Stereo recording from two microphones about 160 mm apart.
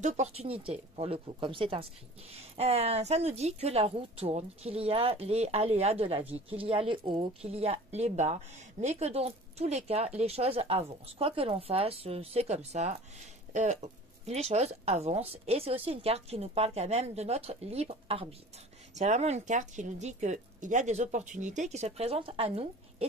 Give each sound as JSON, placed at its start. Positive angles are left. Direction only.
{"t": 0.0, "sound": "a woman's voice", "side_deg": -40}
{"t": 18.9, "sound": "speech", "side_deg": -45}